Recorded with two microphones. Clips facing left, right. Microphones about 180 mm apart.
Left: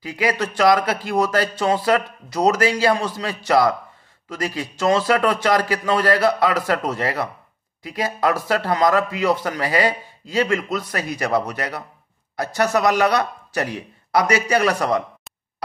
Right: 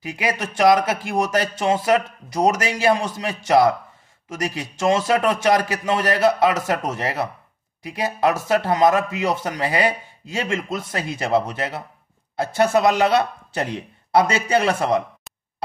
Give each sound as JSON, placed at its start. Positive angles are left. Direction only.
{"t": 0.0, "sound": "speech", "side_deg": -20}